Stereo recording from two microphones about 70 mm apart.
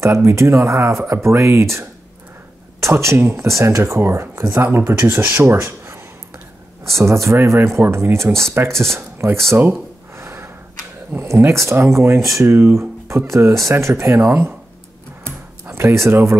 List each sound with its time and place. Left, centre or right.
0.0 s speech: right
9.6 s gasp: right
11.1 s speech: right
15.6 s speech: right